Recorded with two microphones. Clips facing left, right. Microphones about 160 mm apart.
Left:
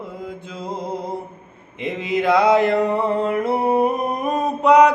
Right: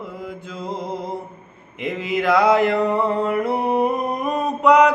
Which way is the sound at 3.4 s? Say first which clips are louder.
Left 2 dB; 25° left (ahead or behind).